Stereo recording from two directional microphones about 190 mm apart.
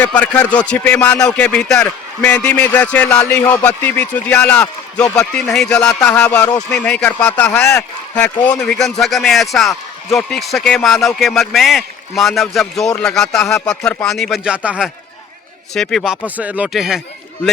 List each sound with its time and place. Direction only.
0.0 s a man's voice: 5° left (ahead or behind)